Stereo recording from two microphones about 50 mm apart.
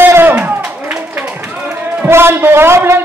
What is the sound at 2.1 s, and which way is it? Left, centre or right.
Speech, right.